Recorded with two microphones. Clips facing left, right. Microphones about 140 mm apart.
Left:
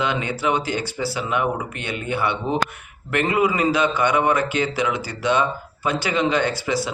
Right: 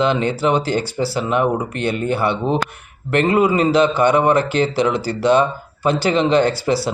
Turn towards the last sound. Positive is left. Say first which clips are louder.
# right 5 dB
turn(degrees=-35)  # may be behind; listen again after turning